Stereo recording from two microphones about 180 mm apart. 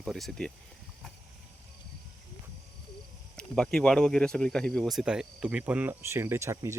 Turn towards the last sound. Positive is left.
turn(degrees=-15)  # may be behind; listen again after turning